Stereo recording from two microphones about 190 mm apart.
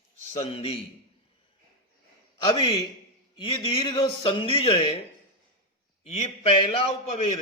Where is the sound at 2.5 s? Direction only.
25° left (ahead or behind).